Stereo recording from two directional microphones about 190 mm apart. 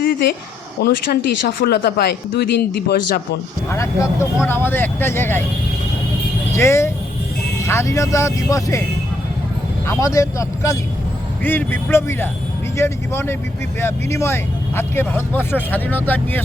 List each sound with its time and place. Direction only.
0.0 s a sound: 50° left (ahead or behind)
0.8 s speech: 55° left (ahead or behind)
3.7 s speech: 15° left (ahead or behind)
6.5 s speech: 15° left (ahead or behind)
9.8 s speech: 15° left (ahead or behind)